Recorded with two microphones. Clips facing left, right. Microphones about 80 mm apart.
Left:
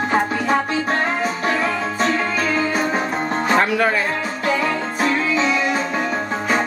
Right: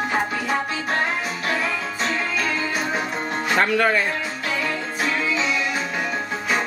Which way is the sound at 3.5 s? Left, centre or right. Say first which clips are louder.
Even; centre.